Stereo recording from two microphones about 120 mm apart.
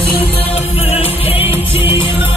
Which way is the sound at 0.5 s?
55° left (ahead or behind).